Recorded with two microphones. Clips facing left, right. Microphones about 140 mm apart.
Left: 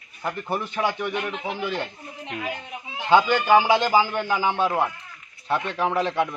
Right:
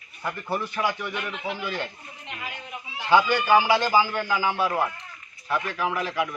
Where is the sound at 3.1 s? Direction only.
20° left (ahead or behind).